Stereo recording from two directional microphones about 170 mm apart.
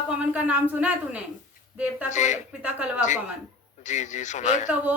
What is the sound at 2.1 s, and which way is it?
Speech, 45° left (ahead or behind).